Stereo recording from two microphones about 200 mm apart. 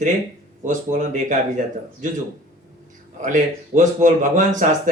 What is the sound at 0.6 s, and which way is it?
Speech, 40° right (ahead or behind).